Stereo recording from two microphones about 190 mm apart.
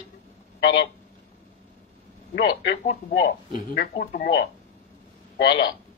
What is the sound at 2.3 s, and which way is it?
Speech, 60° left (ahead or behind).